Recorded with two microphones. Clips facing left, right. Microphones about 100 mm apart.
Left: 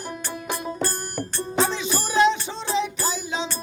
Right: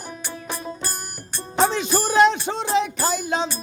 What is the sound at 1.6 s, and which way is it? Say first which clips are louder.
Music: right 4 dB; 55° right (ahead or behind).